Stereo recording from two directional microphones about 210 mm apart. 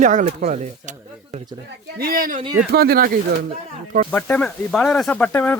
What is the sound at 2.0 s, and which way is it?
Speech, 45° right (ahead or behind).